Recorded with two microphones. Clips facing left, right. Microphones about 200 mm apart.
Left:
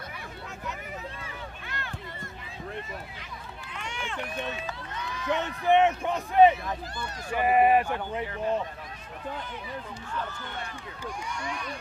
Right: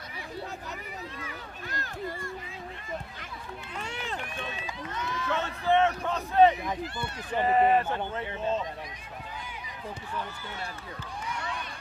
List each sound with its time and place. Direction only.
1.6 s a sound: 40° right (ahead or behind)
3.8 s run: 40° right (ahead or behind)
5.2 s a man's voice: 15° left (ahead or behind)